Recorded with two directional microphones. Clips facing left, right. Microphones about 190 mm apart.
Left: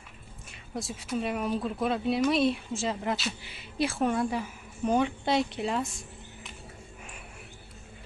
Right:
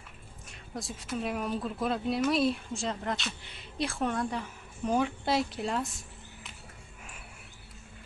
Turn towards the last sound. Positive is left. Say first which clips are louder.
# left 3 dB
turn(degrees=0)  # may be behind; listen again after turning